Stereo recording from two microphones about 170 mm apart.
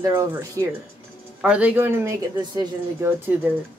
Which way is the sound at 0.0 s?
15° right (ahead or behind).